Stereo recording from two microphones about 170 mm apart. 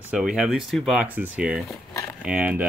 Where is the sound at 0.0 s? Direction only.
5° right (ahead or behind).